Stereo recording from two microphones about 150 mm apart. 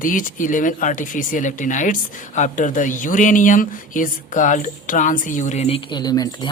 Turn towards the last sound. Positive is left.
turn(degrees=25)  # may be behind; listen again after turning